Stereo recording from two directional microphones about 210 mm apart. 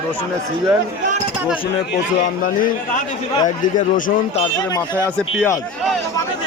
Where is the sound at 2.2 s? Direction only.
40° left (ahead or behind).